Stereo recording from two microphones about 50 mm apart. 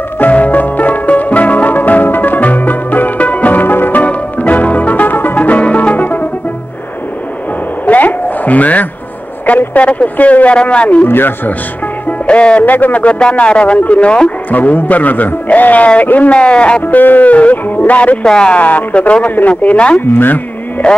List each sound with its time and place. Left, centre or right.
0.2 s music: left
7.8 s a sound: left
9.5 s a man's voice: left
11.1 s a man's voice: left
12.1 s music: left
12.6 s speech: left
13.0 s a man's voice: left
14.5 s a man's voice: left
16.8 s speech: left
18.2 s speech: centre
18.5 s a man's voice: left
20.2 s speech: left